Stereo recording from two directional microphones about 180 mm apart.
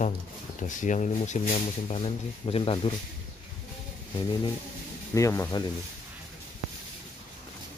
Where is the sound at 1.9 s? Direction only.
30° left (ahead or behind).